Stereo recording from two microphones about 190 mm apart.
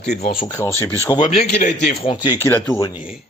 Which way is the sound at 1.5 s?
40° left (ahead or behind).